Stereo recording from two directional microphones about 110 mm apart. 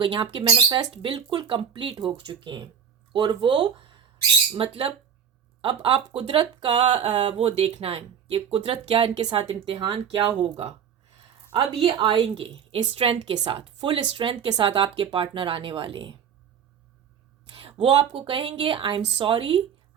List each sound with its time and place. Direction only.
0.0 s speech: 55° right (ahead or behind)
1.1 s a woman's voice: 55° right (ahead or behind)
6.4 s a woman's voice: 45° right (ahead or behind)
17.5 s speech: 55° right (ahead or behind)